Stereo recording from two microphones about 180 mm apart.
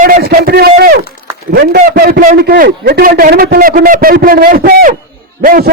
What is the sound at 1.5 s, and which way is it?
A man's voice, 60° right (ahead or behind).